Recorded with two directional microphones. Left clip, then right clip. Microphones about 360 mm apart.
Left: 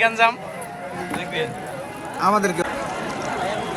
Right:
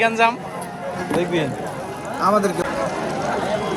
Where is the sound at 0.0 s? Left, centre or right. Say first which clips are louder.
Even; centre.